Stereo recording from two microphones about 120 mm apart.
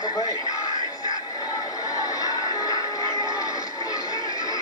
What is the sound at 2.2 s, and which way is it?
Music, 30° left (ahead or behind).